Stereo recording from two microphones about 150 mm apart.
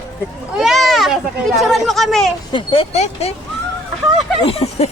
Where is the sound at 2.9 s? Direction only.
45° left (ahead or behind).